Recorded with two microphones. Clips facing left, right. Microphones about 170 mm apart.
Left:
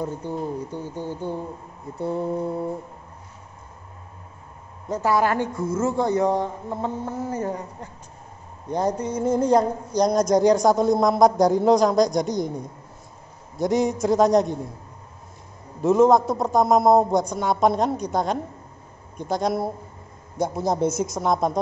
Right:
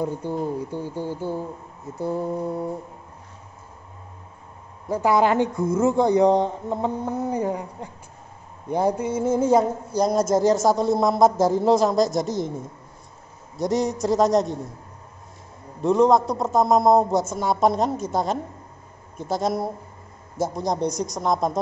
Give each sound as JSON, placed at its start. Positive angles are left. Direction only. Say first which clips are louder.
{"t": 0.0, "sound": "speech", "louder": "right 2 dB", "side_deg": -10}
{"t": 4.8, "sound": "speech", "louder": "right 2 dB", "side_deg": -10}
{"t": 15.8, "sound": "speech", "louder": "left 1 dB", "side_deg": 0}